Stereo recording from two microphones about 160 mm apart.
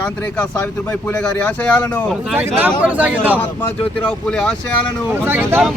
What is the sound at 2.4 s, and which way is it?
Speech, 15° right (ahead or behind).